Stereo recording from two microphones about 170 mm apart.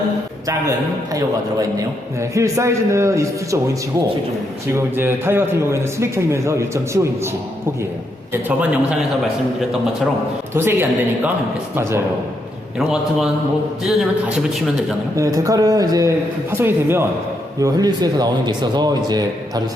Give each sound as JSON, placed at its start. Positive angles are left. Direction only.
{"t": 2.3, "sound": "a man's voice", "side_deg": -15}
{"t": 4.7, "sound": "a man's voice", "side_deg": -15}
{"t": 10.5, "sound": "a man's voice", "side_deg": -15}
{"t": 12.9, "sound": "a man's voice", "side_deg": 0}
{"t": 15.1, "sound": "speech", "side_deg": -20}